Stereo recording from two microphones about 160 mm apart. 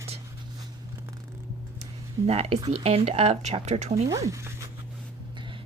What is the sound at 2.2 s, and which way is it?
Speech, 40° right (ahead or behind).